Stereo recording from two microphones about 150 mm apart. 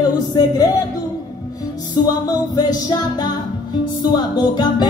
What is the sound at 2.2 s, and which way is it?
Music, 25° left (ahead or behind).